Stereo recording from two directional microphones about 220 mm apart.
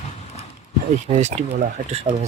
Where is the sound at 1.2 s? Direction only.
30° right (ahead or behind).